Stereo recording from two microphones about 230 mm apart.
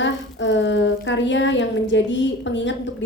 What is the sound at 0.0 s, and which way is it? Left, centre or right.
A woman's voice, left.